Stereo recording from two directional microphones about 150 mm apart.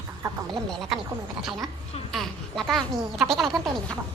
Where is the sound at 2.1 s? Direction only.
Centre (ahead or behind).